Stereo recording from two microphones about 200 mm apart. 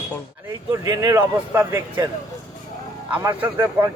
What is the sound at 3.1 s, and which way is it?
Speech, 10° right (ahead or behind).